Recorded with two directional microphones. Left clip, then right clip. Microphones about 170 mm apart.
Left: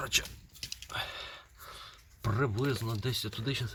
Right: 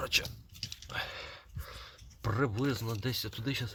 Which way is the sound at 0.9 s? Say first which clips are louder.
Left 1 dB; 20° right (ahead or behind).